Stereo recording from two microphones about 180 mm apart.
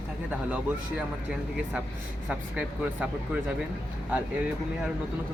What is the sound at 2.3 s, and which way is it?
Speech, 5° right (ahead or behind).